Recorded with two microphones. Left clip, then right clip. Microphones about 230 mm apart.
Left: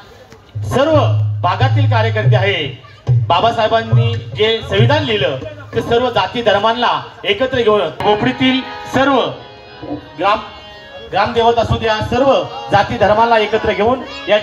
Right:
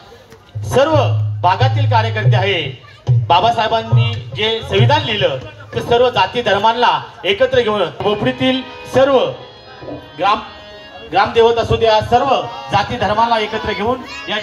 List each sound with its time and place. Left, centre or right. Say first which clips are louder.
0.7 s a man's voice: even; right
8.3 s speech: left 1 dB; right
9.0 s a man's voice: right 1 dB; right